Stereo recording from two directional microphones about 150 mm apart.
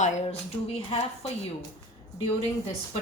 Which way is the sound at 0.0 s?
45° left (ahead or behind).